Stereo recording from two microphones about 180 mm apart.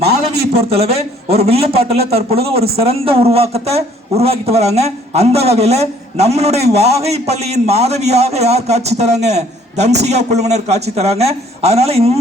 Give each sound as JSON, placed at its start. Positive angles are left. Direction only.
{"t": 0.3, "sound": "a man's voice", "side_deg": -35}